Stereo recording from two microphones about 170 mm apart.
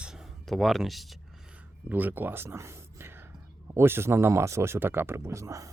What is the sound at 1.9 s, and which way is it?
Speech, 10° right (ahead or behind).